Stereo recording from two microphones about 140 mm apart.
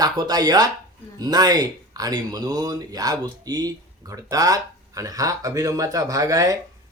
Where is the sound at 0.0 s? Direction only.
30° right (ahead or behind).